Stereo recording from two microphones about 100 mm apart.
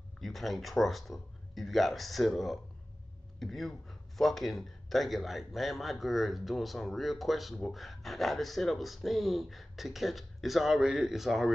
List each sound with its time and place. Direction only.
0.2 s a man's voice: centre (ahead or behind)